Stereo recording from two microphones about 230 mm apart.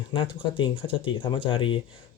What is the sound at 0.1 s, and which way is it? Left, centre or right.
Speech, left.